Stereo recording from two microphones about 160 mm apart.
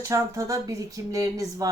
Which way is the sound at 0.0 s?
20° right (ahead or behind).